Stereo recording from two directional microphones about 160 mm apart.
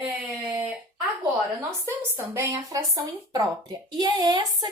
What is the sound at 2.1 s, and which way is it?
Speech, 20° right (ahead or behind).